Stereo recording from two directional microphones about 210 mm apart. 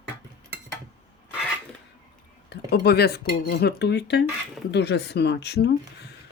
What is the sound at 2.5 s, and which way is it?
Speech, 50° left (ahead or behind).